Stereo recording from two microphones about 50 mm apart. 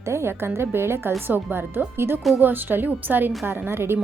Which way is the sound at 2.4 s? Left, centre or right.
Right.